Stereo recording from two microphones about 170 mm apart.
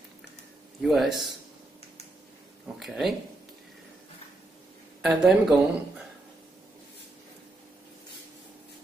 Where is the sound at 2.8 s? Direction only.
Centre (ahead or behind).